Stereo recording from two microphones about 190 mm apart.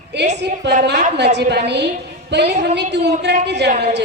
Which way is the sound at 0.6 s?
65° right (ahead or behind).